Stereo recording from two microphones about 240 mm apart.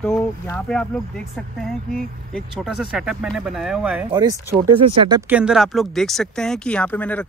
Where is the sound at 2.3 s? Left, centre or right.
Centre.